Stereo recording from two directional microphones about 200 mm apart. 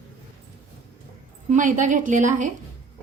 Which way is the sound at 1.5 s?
40° right (ahead or behind).